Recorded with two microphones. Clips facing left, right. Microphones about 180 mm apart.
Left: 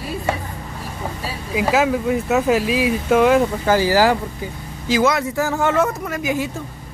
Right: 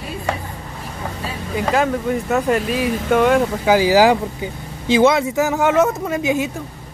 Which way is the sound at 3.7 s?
15° right (ahead or behind).